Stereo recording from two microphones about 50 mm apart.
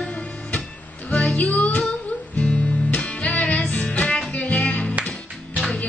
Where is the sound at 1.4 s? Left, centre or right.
Left.